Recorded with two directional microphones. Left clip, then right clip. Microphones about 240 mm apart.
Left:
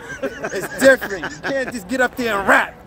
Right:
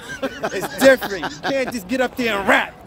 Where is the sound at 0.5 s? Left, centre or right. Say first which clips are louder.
Even; centre.